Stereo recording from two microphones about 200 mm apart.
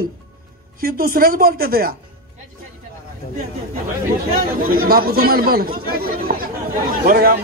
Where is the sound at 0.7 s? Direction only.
50° right (ahead or behind).